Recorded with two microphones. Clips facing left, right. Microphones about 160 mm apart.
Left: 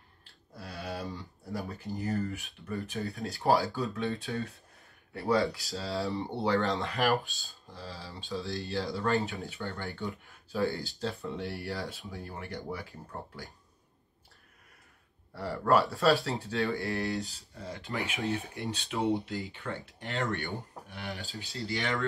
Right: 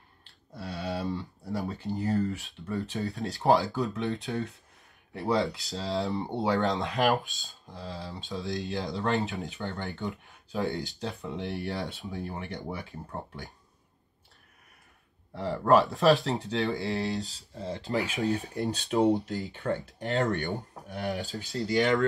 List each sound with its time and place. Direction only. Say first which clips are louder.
0.2 s a sound: right 5 dB; 20° right (ahead or behind)
1.6 s speech: right 4 dB; 20° right (ahead or behind)
15.3 s speech: right 4 dB; 20° right (ahead or behind)
17.9 s speech: right 4 dB; 40° right (ahead or behind)